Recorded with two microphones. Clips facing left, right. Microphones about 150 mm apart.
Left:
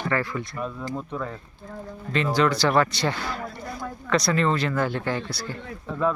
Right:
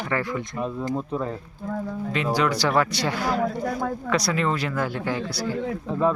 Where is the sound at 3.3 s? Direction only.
90° right.